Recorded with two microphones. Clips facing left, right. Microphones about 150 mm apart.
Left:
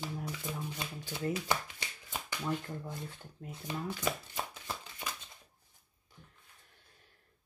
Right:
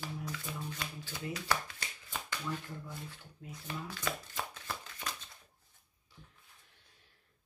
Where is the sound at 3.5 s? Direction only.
20° left (ahead or behind).